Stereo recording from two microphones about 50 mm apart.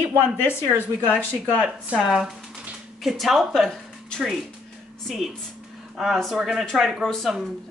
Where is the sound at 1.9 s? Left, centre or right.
Right.